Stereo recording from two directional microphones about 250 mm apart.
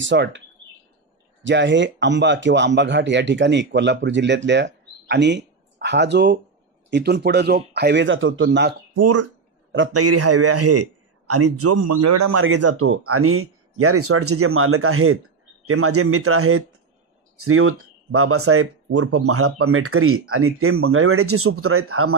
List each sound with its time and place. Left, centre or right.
0.0 s speech: right
1.4 s speech: right
8.9 s a sound: right
9.9 s a man's voice: right